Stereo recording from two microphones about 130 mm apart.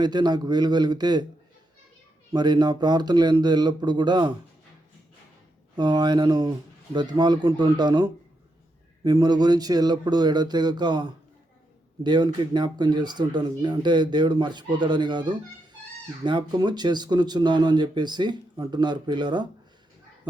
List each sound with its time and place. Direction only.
0.0 s speech: 35° right (ahead or behind)
2.3 s speech: 35° right (ahead or behind)
5.7 s speech: 35° right (ahead or behind)